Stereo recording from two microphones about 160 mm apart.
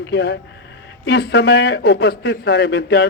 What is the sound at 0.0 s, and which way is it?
A man's voice, 90° left.